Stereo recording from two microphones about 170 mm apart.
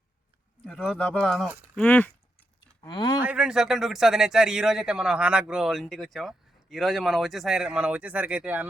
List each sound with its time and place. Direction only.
0.6 s speech: 5° left (ahead or behind)
2.8 s speech: 25° left (ahead or behind)
3.2 s speech: 5° right (ahead or behind)